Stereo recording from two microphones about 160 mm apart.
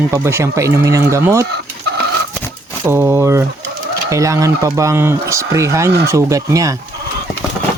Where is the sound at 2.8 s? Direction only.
15° right (ahead or behind).